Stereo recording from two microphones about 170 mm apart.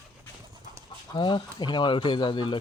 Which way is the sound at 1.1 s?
25° left (ahead or behind).